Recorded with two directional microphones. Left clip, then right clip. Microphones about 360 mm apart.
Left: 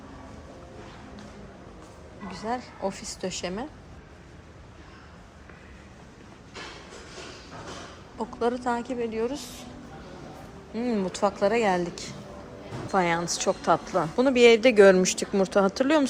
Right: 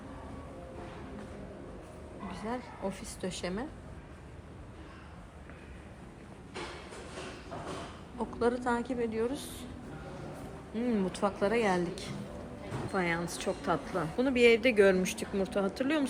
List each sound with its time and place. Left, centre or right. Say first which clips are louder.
2.3 s a woman's voice: left 8 dB; centre
8.2 s a woman's voice: left 4 dB; centre
10.8 s a woman's voice: left 5 dB; centre